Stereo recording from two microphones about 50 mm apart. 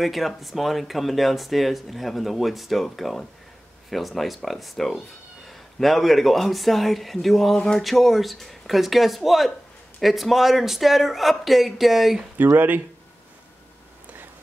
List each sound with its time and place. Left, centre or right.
0.0 s speech: centre
7.5 s a sound: centre
7.8 s speech: centre
12.5 s speech: right